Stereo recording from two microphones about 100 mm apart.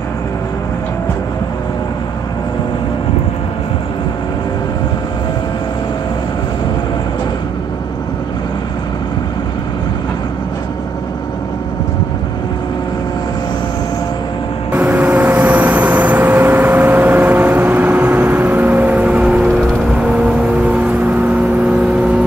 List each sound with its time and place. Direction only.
14.7 s vehicle: 20° right (ahead or behind)